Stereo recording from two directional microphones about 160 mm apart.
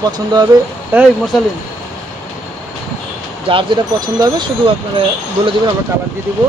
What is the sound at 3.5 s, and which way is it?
Speech, 30° right (ahead or behind).